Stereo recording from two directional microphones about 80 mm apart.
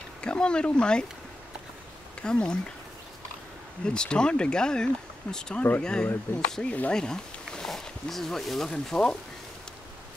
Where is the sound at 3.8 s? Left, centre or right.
Centre.